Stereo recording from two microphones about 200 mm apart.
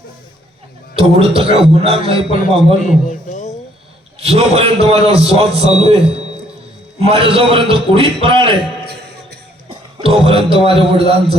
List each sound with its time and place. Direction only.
0.9 s a man's voice: 30° right (ahead or behind)
2.8 s a man's voice: 40° left (ahead or behind)
4.2 s a man's voice: 30° right (ahead or behind)
7.1 s a man's voice: 30° right (ahead or behind)
9.6 s a man's voice: 30° right (ahead or behind)